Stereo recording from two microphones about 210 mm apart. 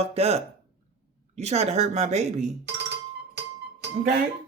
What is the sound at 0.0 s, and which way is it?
Speech, 30° right (ahead or behind).